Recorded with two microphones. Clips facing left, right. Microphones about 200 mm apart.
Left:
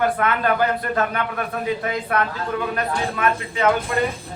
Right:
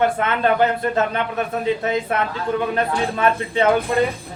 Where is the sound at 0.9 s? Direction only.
25° right (ahead or behind).